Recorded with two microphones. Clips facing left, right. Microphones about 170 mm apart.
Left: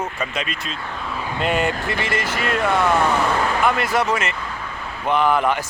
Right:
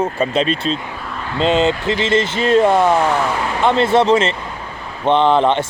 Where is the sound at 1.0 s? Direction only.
5° left (ahead or behind).